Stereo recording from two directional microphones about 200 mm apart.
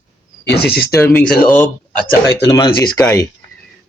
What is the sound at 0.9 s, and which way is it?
Speech, 15° left (ahead or behind).